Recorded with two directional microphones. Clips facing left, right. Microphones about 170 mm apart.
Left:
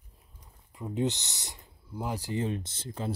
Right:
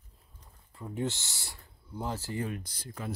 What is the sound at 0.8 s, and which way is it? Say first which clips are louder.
Speech: left 4 dB; 20° left (ahead or behind).